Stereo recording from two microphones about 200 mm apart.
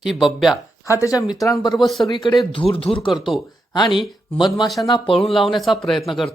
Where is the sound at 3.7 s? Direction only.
25° left (ahead or behind).